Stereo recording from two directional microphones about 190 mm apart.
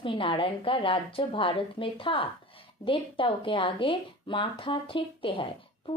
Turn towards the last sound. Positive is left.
turn(degrees=30)  # may be behind; listen again after turning